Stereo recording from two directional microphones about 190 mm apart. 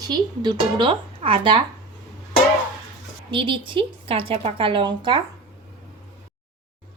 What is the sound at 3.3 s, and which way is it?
A woman's voice, 25° right (ahead or behind).